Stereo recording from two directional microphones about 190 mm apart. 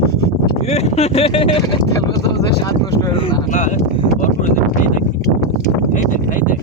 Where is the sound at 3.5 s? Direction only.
40° left (ahead or behind).